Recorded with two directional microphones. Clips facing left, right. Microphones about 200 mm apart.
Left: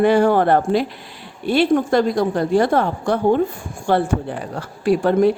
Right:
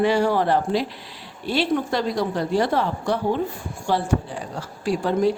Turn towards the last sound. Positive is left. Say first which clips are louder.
# left 5 dB
turn(degrees=60)  # may be behind; listen again after turning